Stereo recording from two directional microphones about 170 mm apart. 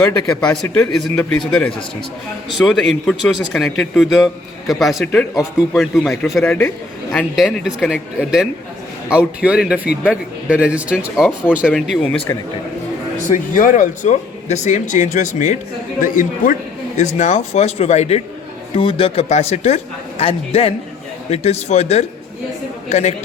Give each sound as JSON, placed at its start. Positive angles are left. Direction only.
{"t": 0.0, "sound": "a man's voice", "side_deg": 5}
{"t": 2.5, "sound": "a man's voice", "side_deg": 0}
{"t": 12.3, "sound": "speech", "side_deg": 15}
{"t": 13.2, "sound": "a man's voice", "side_deg": 50}